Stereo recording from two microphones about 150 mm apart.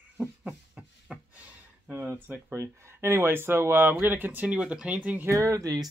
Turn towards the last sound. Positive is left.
turn(degrees=-25)  # may be behind; listen again after turning